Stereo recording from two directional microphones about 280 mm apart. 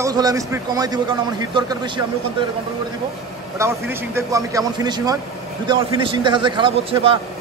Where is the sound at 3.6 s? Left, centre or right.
Centre.